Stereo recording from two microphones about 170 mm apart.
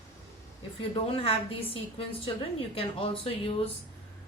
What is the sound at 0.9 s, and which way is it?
A woman's voice, 30° left (ahead or behind).